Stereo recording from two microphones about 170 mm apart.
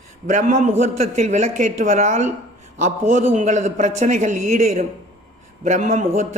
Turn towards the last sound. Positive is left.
turn(degrees=-45)  # may be behind; listen again after turning